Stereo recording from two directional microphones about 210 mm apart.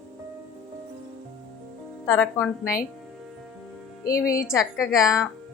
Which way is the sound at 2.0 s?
5° left (ahead or behind).